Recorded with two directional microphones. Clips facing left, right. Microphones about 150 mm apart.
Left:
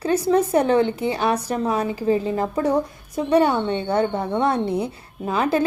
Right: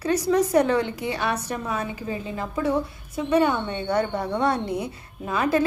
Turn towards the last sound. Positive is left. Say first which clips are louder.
# left 2 dB
turn(degrees=30)  # may be behind; listen again after turning